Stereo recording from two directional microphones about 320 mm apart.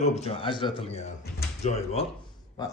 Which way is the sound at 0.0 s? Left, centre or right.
Centre.